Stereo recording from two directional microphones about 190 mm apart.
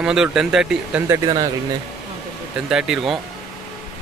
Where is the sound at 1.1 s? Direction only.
20° right (ahead or behind).